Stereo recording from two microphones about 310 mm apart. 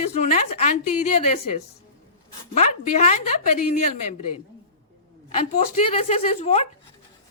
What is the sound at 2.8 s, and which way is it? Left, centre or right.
Speech, left.